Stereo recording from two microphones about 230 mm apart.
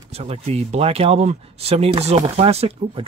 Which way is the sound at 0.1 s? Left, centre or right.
Right.